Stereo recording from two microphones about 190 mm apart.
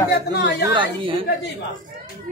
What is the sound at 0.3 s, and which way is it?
Speech, 60° left (ahead or behind).